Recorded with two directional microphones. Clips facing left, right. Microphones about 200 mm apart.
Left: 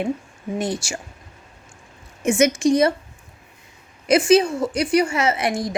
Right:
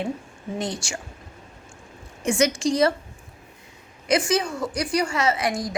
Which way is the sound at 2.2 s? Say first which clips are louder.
Left 4 dB; 20° left (ahead or behind).